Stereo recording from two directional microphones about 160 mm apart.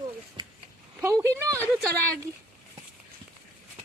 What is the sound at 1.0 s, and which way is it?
Speech, 15° right (ahead or behind).